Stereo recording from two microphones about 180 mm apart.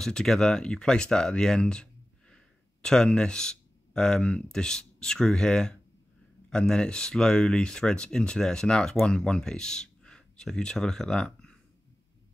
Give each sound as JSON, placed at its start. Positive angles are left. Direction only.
{"t": 0.0, "sound": "speech", "side_deg": 5}